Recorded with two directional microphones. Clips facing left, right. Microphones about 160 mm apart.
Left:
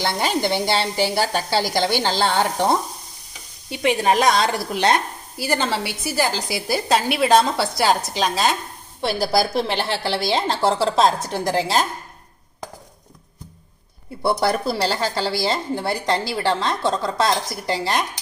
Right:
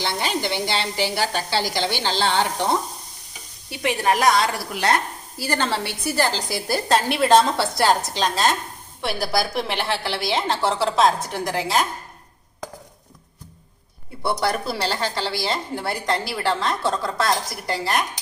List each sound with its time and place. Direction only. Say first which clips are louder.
0.0 s a woman's voice: left 3 dB; 45° left (ahead or behind)
3.7 s a woman's voice: left 3 dB; 20° left (ahead or behind); by 8.5 s 5° left (ahead or behind)
9.0 s a woman's voice: left 4 dB; 30° left (ahead or behind)
14.4 s a woman's voice: left 2 dB; 35° left (ahead or behind)